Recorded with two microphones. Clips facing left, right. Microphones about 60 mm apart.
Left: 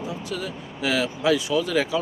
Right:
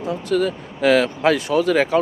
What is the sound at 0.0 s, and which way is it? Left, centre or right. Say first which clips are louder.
Speech: right 10 dB; right.